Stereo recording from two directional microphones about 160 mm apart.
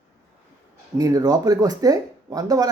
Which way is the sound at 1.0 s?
25° right (ahead or behind).